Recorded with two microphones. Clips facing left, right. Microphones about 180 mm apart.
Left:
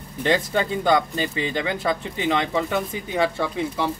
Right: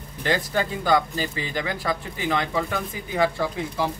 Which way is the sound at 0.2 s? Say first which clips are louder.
Left 3 dB; 25° left (ahead or behind).